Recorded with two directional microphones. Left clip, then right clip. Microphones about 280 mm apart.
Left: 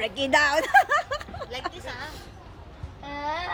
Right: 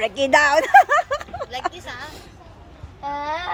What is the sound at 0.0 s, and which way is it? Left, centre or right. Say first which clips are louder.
Speech: right 6 dB; centre.